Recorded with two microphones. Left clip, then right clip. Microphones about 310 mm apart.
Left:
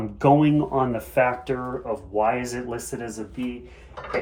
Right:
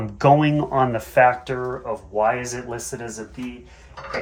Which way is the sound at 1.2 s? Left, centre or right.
Right.